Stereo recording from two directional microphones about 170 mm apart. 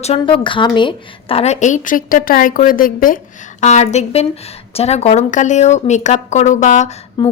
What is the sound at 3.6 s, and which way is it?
A woman's voice, 40° left (ahead or behind).